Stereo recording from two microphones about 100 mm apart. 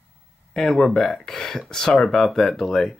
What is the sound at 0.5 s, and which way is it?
Speech, 5° left (ahead or behind).